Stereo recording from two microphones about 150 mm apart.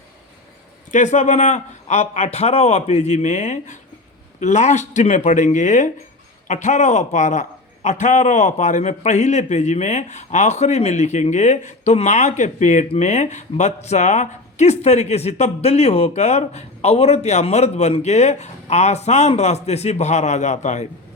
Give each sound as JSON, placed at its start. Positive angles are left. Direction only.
{"t": 0.9, "sound": "a man's voice", "side_deg": 55}